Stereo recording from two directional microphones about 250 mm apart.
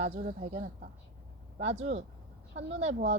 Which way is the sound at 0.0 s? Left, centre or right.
Right.